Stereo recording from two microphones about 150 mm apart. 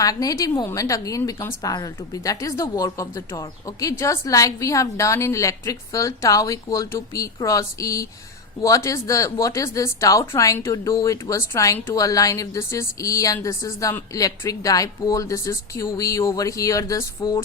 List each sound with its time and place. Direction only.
0.0 s a woman's voice: 25° left (ahead or behind)